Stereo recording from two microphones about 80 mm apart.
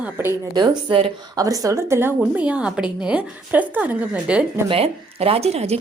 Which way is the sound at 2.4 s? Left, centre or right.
Centre.